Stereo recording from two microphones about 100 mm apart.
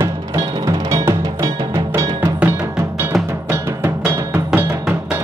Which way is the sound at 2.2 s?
20° right (ahead or behind).